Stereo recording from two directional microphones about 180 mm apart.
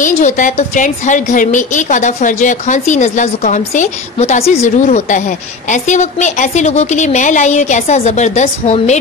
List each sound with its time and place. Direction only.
0.0 s a woman's voice: 45° left (ahead or behind)